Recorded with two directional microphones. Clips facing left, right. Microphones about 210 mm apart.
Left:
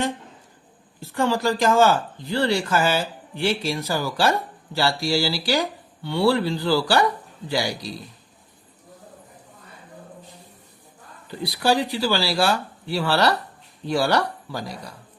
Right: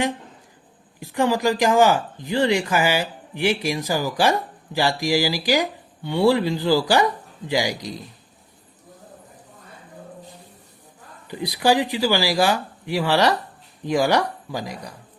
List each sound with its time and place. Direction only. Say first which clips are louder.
0.9 s speech: right 2 dB; 15° right (ahead or behind)
11.3 s speech: right 2 dB; 15° right (ahead or behind)